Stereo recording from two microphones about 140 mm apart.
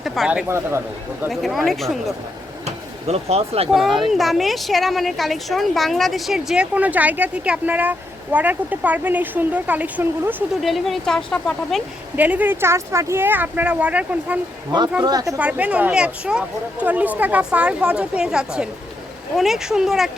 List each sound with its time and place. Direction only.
0.0 s speech: centre (ahead or behind)
0.4 s speech: 20° right (ahead or behind)
1.3 s speech: centre (ahead or behind)
2.6 s speech: 50° right (ahead or behind)
3.7 s a woman's voice: centre (ahead or behind)
10.6 s speech: centre (ahead or behind)
12.1 s a woman's voice: 10° right (ahead or behind)
15.0 s speech: 25° right (ahead or behind)
15.4 s a woman's voice: 10° right (ahead or behind)